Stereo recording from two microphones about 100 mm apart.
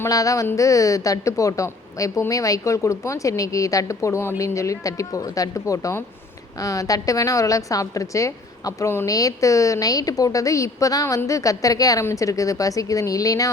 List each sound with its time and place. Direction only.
0.1 s a woman's voice: 35° left (ahead or behind)